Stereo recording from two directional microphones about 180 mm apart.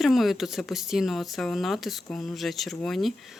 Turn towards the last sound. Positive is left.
turn(degrees=0)  # may be behind; listen again after turning